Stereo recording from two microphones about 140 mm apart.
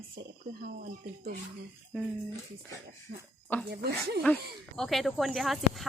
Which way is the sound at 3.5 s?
10° left (ahead or behind).